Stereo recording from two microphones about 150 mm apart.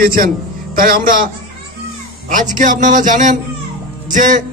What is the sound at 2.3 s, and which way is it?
Speech, 60° right (ahead or behind).